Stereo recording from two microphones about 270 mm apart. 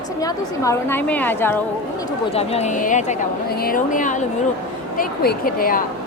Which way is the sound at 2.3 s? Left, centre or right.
Left.